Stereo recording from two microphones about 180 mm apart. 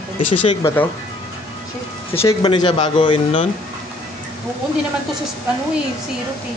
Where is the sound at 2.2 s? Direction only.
25° left (ahead or behind).